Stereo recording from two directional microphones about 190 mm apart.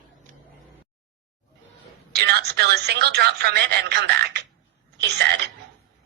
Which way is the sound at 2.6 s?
60° right (ahead or behind).